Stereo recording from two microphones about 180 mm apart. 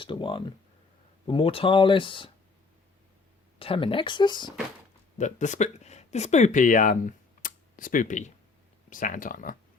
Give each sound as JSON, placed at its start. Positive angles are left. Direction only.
{"t": 0.0, "sound": "speech", "side_deg": 25}
{"t": 3.6, "sound": "speech", "side_deg": 30}
{"t": 5.1, "sound": "speech", "side_deg": 40}
{"t": 7.4, "sound": "computer keyboard", "side_deg": 50}
{"t": 8.9, "sound": "speech", "side_deg": 50}